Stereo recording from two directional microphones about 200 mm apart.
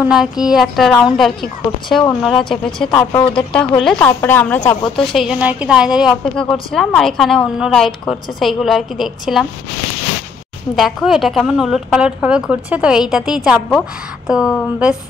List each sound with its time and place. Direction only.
0.0 s a woman's voice: 5° right (ahead or behind)
4.9 s a woman's voice: centre (ahead or behind)
10.8 s a woman's voice: centre (ahead or behind)